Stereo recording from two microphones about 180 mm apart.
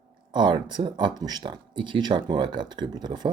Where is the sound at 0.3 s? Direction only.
25° right (ahead or behind).